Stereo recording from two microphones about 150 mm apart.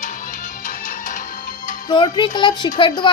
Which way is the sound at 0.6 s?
60° left (ahead or behind).